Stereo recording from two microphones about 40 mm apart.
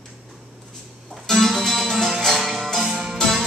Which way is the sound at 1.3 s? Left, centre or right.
Centre.